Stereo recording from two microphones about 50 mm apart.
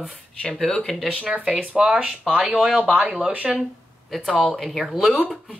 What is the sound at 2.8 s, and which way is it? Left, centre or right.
Speech, right.